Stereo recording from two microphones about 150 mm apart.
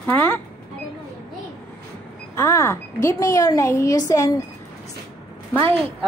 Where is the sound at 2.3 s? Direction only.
15° left (ahead or behind).